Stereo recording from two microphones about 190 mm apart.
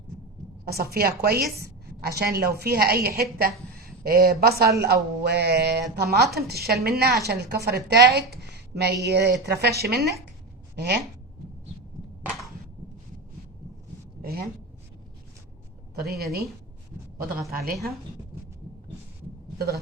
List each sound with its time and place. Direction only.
0.6 s a woman's voice: 55° right (ahead or behind)
14.2 s a sound: 55° right (ahead or behind)
16.0 s a woman's voice: 55° right (ahead or behind)
17.5 s a woman's voice: 50° right (ahead or behind)
19.5 s speech: 55° right (ahead or behind)